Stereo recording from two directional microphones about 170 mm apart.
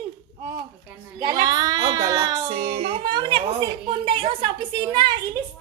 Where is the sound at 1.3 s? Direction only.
20° right (ahead or behind).